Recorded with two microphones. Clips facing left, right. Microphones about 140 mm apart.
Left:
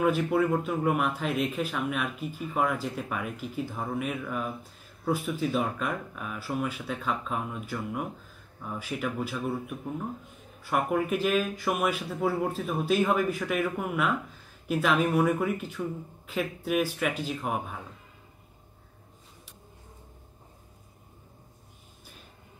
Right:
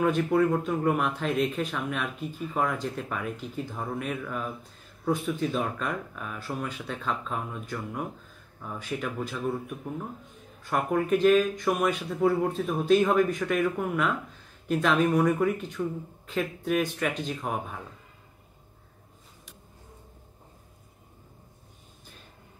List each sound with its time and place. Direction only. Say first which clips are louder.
0.0 s a man's voice: right 1 dB; 5° left (ahead or behind)